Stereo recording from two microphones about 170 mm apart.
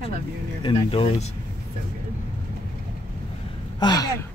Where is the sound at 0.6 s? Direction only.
30° left (ahead or behind).